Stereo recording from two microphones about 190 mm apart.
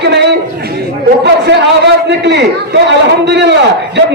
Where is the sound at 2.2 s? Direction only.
65° right (ahead or behind).